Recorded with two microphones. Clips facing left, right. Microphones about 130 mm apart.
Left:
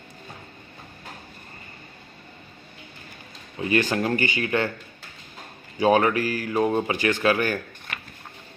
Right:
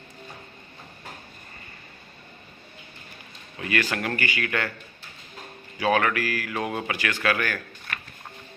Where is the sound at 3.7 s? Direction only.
30° left (ahead or behind).